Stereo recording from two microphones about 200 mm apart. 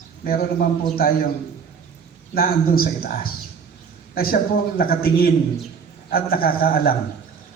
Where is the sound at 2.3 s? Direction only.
45° left (ahead or behind).